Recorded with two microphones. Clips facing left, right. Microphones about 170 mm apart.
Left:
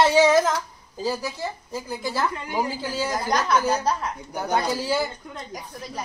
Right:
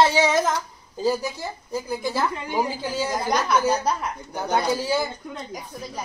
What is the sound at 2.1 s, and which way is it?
A woman's voice, 15° right (ahead or behind).